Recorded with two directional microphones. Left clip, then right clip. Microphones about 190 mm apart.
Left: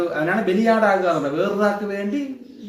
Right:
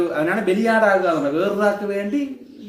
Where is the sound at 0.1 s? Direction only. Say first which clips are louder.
Right 1 dB; 20° right (ahead or behind).